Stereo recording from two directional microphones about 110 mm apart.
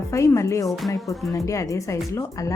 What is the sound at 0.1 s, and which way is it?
Speech, 25° left (ahead or behind).